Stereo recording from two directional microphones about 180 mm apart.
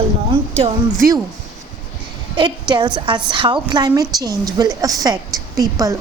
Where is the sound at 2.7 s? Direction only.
25° right (ahead or behind).